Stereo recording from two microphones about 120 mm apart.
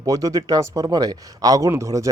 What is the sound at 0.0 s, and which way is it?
Speech, 30° right (ahead or behind).